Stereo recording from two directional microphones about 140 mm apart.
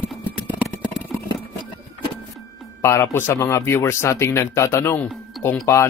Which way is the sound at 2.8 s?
20° left (ahead or behind).